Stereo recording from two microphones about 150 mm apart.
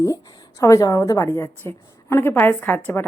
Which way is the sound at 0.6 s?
20° left (ahead or behind).